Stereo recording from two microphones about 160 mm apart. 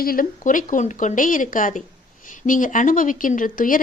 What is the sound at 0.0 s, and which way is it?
Speech, 65° left (ahead or behind).